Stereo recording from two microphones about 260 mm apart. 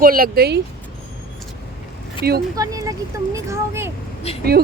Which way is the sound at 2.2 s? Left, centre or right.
Right.